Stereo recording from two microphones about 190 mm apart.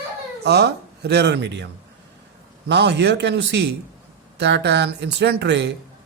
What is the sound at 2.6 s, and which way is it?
A man's voice, 65° right (ahead or behind).